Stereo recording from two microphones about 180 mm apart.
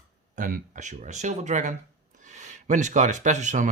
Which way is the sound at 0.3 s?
45° right (ahead or behind).